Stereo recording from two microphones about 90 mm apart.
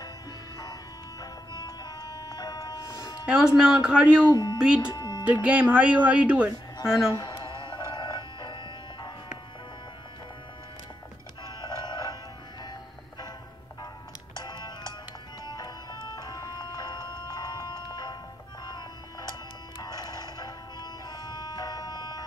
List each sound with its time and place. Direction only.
1.2 s music: 45° left (ahead or behind)
3.3 s speech: 10° right (ahead or behind)
4.3 s speech: 45° left (ahead or behind)
4.6 s speech: 10° right (ahead or behind)
4.9 s music: 45° left (ahead or behind)
5.2 s speech: 15° right (ahead or behind)
7.3 s music: 65° left (ahead or behind)
11.6 s music: 50° left (ahead or behind)
14.3 s music: 55° left (ahead or behind)